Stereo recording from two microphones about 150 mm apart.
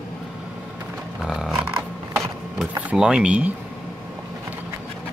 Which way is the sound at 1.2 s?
5° right (ahead or behind).